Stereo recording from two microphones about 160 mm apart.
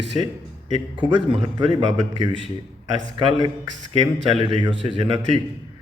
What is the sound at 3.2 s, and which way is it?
A man's voice, 30° right (ahead or behind).